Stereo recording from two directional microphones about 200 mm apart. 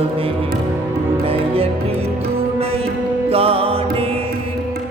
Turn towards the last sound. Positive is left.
turn(degrees=-30)  # may be behind; listen again after turning